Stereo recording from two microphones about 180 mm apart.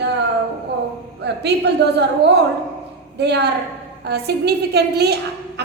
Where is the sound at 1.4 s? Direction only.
70° right (ahead or behind).